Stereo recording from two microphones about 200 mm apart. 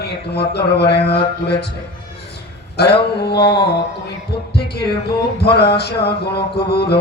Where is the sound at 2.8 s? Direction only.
55° left (ahead or behind).